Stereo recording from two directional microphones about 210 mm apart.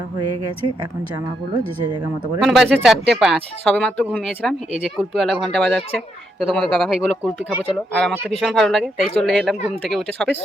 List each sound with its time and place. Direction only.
1.5 s speech: 20° right (ahead or behind)
2.4 s speech: centre (ahead or behind)